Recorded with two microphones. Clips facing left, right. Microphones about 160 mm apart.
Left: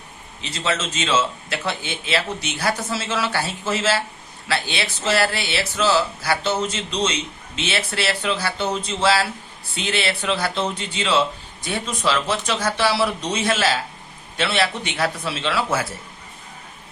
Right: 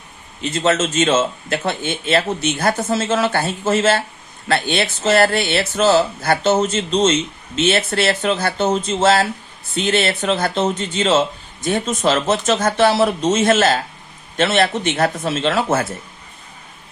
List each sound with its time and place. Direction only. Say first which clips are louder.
0.4 s a man's voice: right 8 dB; 50° right (ahead or behind)